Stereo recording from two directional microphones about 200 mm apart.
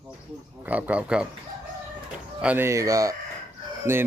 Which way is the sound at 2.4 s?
10° right (ahead or behind).